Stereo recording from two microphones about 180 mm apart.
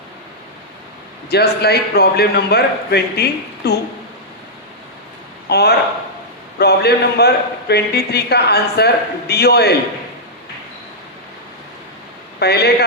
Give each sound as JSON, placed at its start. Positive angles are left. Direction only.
{"t": 1.3, "sound": "a man's voice", "side_deg": 65}
{"t": 5.5, "sound": "a man's voice", "side_deg": 65}
{"t": 12.4, "sound": "a man's voice", "side_deg": 65}